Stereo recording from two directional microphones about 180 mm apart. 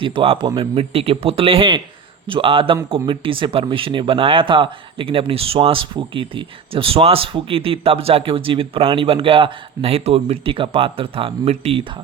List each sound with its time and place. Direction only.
0.0 s speech: 30° right (ahead or behind)